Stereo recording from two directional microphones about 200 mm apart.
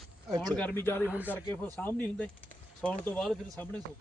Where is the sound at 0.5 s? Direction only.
10° left (ahead or behind).